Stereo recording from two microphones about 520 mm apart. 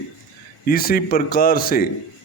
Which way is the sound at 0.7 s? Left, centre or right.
Centre.